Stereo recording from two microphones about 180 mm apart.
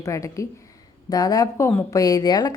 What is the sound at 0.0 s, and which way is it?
Speech, 15° left (ahead or behind).